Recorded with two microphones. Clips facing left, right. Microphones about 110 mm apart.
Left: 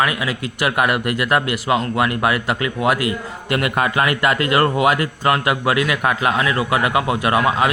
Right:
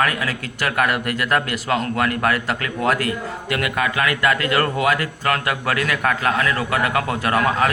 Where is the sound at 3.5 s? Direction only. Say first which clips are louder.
Left 3 dB; 25° left (ahead or behind).